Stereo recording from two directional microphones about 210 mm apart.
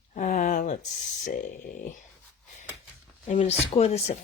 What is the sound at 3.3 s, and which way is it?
Speech, 30° left (ahead or behind).